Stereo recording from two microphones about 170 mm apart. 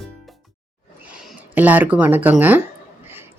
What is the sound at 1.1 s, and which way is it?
Speech, 5° right (ahead or behind).